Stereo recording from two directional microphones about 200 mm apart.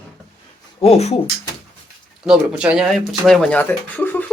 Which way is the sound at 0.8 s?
30° left (ahead or behind).